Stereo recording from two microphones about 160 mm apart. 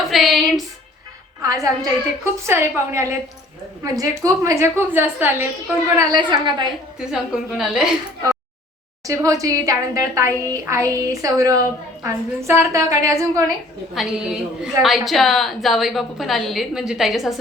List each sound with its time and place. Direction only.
0.1 s a sound: centre (ahead or behind)
1.4 s a woman's voice: 20° right (ahead or behind)
6.0 s a woman's voice: 25° right (ahead or behind)
7.0 s a woman's voice: 5° right (ahead or behind)
9.0 s a woman's voice: 20° right (ahead or behind)
13.9 s a woman's voice: centre (ahead or behind)